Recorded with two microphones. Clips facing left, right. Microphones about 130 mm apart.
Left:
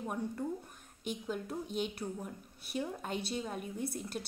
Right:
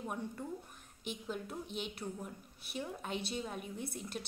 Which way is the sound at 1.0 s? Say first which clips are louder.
Left 3 dB; 40° left (ahead or behind).